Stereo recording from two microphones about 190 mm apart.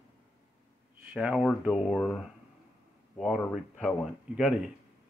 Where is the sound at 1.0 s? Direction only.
5° right (ahead or behind).